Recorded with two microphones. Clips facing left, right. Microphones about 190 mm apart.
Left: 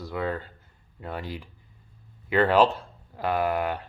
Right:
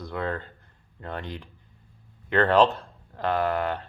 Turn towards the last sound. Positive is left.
turn(degrees=10)  # may be behind; listen again after turning